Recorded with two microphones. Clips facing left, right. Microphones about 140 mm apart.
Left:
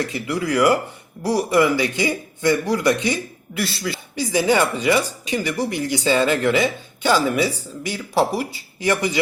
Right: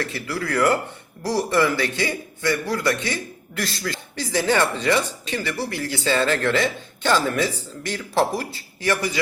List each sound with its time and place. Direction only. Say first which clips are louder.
0.0 s speech: left 4 dB; 15° left (ahead or behind)
3.6 s speech: left 3 dB; 5° left (ahead or behind)